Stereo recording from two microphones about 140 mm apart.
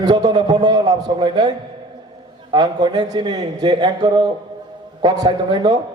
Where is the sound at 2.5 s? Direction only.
30° right (ahead or behind).